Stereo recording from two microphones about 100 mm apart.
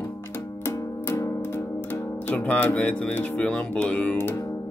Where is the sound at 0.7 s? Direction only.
25° left (ahead or behind).